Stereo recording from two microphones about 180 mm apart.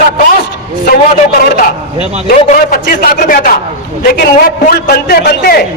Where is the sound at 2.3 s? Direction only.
45° left (ahead or behind); by 5.6 s 60° left (ahead or behind).